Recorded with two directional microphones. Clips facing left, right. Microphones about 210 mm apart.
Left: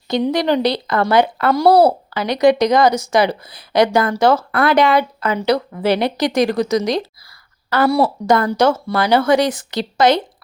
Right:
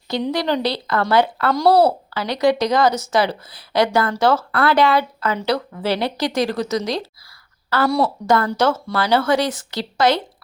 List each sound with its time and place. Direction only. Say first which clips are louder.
0.1 s speech: left 4 dB; 15° left (ahead or behind)